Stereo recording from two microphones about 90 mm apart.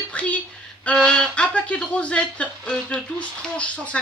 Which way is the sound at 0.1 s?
15° left (ahead or behind).